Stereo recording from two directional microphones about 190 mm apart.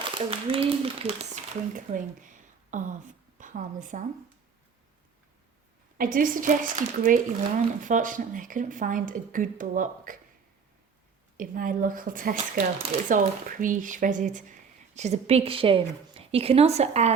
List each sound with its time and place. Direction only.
0.1 s speech: 30° right (ahead or behind)
1.7 s a woman's voice: 45° right (ahead or behind)
6.0 s a woman's voice: 45° right (ahead or behind)
11.3 s speech: 45° right (ahead or behind)